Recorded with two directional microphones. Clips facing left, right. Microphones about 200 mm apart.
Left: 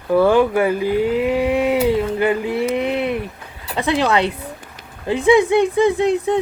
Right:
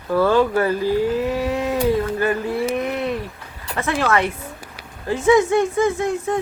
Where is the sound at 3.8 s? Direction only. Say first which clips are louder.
Left 3 dB; 15° left (ahead or behind).